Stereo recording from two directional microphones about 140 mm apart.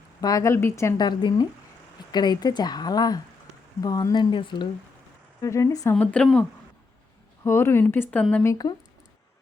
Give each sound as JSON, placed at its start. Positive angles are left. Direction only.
{"t": 0.2, "sound": "speech", "side_deg": 25}
{"t": 5.4, "sound": "speech", "side_deg": 20}
{"t": 5.9, "sound": "speech", "side_deg": 10}
{"t": 7.4, "sound": "speech", "side_deg": 20}
{"t": 8.4, "sound": "speech", "side_deg": 30}